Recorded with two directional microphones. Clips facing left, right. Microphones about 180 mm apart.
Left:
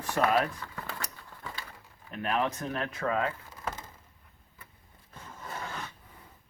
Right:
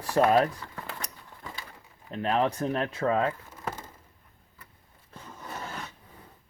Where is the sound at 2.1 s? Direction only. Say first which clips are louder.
Right 4 dB; 30° right (ahead or behind).